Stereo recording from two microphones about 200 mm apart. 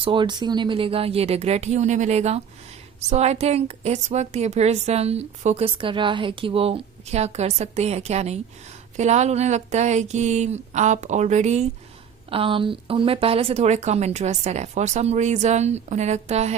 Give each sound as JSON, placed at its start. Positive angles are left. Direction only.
{"t": 0.0, "sound": "a woman's voice", "side_deg": -25}